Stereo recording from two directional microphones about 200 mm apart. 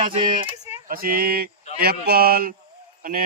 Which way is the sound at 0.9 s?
45° right (ahead or behind).